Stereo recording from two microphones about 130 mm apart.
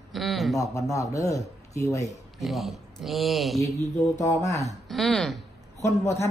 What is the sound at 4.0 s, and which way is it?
Speech, 25° left (ahead or behind).